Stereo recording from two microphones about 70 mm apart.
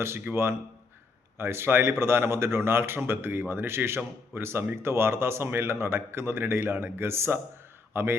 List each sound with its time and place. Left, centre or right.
0.0 s a man's voice: right